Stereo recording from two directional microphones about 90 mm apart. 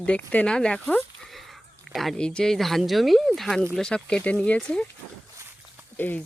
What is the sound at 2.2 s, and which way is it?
Speech, 10° left (ahead or behind).